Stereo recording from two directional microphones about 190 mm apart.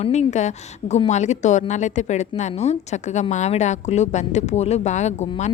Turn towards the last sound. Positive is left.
turn(degrees=35)  # may be behind; listen again after turning